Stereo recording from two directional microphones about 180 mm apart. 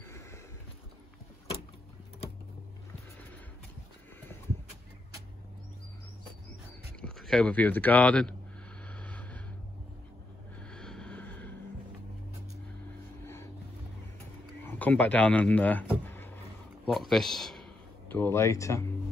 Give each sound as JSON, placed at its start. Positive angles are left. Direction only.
{"t": 0.0, "sound": "a sound", "side_deg": 15}
{"t": 7.0, "sound": "speech", "side_deg": 5}
{"t": 8.8, "sound": "vehicle", "side_deg": 5}
{"t": 10.7, "sound": "vehicle", "side_deg": 5}
{"t": 14.6, "sound": "speech", "side_deg": 10}
{"t": 16.8, "sound": "a man's voice", "side_deg": 0}
{"t": 18.1, "sound": "speech", "side_deg": 15}